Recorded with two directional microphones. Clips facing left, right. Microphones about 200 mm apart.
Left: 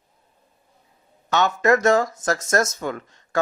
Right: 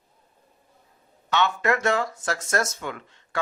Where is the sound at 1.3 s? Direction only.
40° left (ahead or behind).